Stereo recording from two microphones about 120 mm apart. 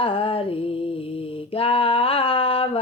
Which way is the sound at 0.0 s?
50° left (ahead or behind).